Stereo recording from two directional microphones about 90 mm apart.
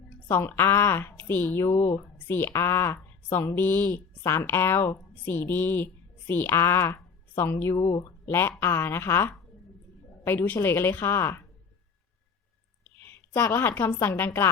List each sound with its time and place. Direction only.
0.3 s a woman's voice: 25° left (ahead or behind)
7.8 s speech: 45° left (ahead or behind)
8.3 s a woman's voice: 25° left (ahead or behind)
13.0 s a woman's voice: 30° left (ahead or behind)